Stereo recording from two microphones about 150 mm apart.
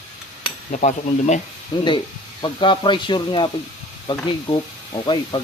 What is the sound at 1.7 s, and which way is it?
Speech, 30° left (ahead or behind).